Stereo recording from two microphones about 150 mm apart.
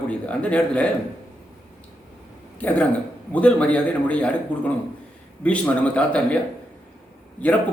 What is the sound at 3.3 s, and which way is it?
A man's voice, 10° left (ahead or behind).